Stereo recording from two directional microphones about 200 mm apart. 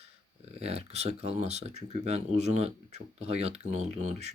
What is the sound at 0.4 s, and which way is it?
Speech, 30° right (ahead or behind).